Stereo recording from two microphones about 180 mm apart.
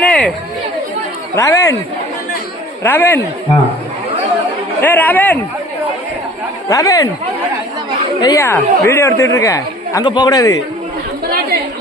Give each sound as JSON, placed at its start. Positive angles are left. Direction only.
{"t": 0.0, "sound": "chatter", "side_deg": 5}
{"t": 1.4, "sound": "a woman's voice", "side_deg": 15}
{"t": 2.8, "sound": "a woman's voice", "side_deg": 10}
{"t": 4.8, "sound": "a woman's voice", "side_deg": 10}
{"t": 6.7, "sound": "speech", "side_deg": 20}
{"t": 8.2, "sound": "a woman's voice", "side_deg": 20}